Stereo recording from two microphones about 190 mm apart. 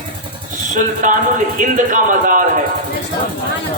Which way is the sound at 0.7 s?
45° right (ahead or behind).